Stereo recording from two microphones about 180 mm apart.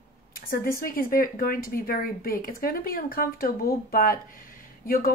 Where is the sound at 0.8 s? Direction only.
50° left (ahead or behind).